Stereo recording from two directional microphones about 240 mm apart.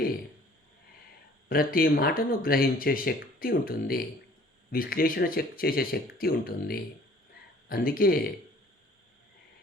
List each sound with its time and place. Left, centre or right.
1.5 s speech: left